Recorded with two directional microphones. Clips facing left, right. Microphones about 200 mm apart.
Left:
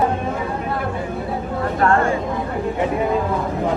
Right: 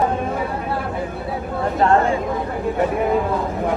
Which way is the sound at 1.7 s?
20° right (ahead or behind).